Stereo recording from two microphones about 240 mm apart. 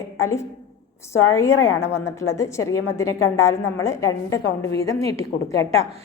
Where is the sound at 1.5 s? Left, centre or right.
Left.